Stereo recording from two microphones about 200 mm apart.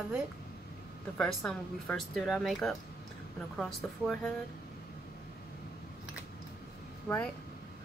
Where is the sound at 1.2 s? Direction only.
5° left (ahead or behind).